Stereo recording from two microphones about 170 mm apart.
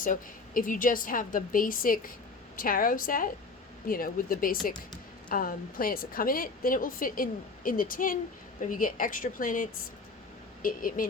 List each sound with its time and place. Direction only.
0.0 s a woman's voice: 55° left (ahead or behind)